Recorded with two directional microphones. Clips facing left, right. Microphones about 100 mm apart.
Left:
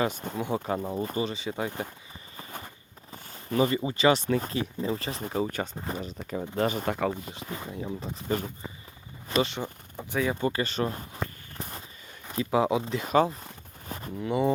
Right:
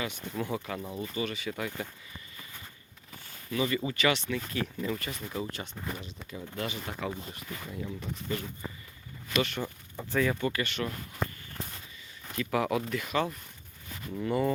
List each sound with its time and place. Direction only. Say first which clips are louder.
0.5 s speech: left 6 dB; 35° left (ahead or behind)
1.3 s speech: left 3 dB; 25° left (ahead or behind)
3.5 s speech: left 5 dB; 40° left (ahead or behind)
3.8 s speech: left 5 dB; 30° left (ahead or behind)
5.7 s speech: left 5 dB; 30° left (ahead or behind)
6.1 s speech: left 8 dB; 60° left (ahead or behind)
6.6 s speech: left 9 dB; 45° left (ahead or behind)
7.3 s speech: left 4 dB; 25° left (ahead or behind)
9.3 s speech: left 3 dB; 25° left (ahead or behind)
10.4 s speech: left 4 dB; 30° left (ahead or behind)
12.3 s speech: left 4 dB; 25° left (ahead or behind)
13.8 s a sound: left 6 dB; 40° left (ahead or behind)
14.2 s speech: left 1 dB; 5° left (ahead or behind)